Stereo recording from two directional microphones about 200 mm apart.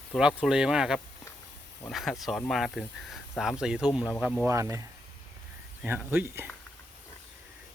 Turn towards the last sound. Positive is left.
turn(degrees=-10)  # may be behind; listen again after turning